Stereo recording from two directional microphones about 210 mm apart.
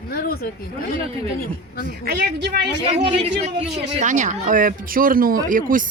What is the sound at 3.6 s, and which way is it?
Speech, 35° right (ahead or behind).